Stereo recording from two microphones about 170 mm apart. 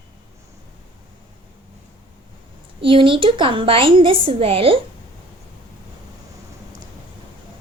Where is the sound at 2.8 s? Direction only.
30° right (ahead or behind).